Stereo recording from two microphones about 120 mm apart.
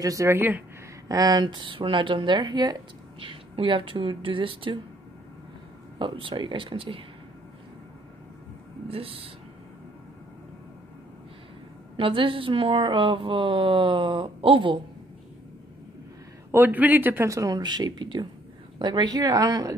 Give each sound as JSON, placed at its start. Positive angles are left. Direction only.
{"t": 0.0, "sound": "a man's voice", "side_deg": -25}
{"t": 1.0, "sound": "speech", "side_deg": -30}
{"t": 5.9, "sound": "speech", "side_deg": -45}
{"t": 8.8, "sound": "speech", "side_deg": -55}
{"t": 12.0, "sound": "speech", "side_deg": -45}
{"t": 16.5, "sound": "a man's voice", "side_deg": -15}